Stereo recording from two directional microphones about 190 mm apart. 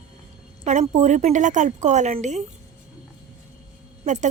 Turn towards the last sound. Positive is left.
turn(degrees=-40)  # may be behind; listen again after turning